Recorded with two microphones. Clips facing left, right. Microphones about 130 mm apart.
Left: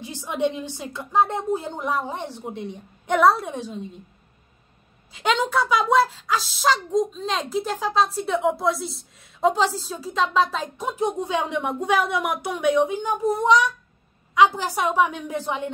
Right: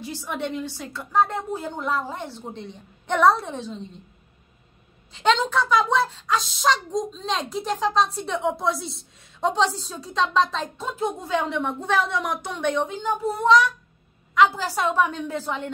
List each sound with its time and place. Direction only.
0.0 s a woman's voice: 20° left (ahead or behind)
5.1 s a woman's voice: 10° left (ahead or behind)